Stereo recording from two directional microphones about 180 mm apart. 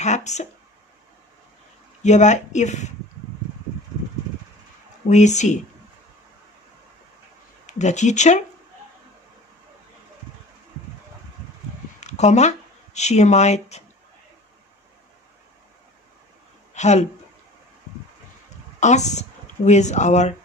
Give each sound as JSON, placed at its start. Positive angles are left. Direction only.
{"t": 0.0, "sound": "speech", "side_deg": 40}
{"t": 2.0, "sound": "speech", "side_deg": 40}
{"t": 5.0, "sound": "speech", "side_deg": 40}
{"t": 7.7, "sound": "speech", "side_deg": 40}
{"t": 11.9, "sound": "speech", "side_deg": 40}
{"t": 16.7, "sound": "speech", "side_deg": 40}
{"t": 18.8, "sound": "speech", "side_deg": 40}